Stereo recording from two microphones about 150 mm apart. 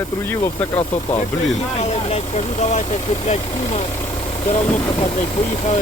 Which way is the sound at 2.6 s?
50° left (ahead or behind).